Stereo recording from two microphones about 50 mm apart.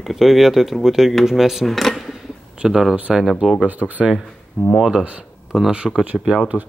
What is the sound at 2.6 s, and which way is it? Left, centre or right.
Speech, centre.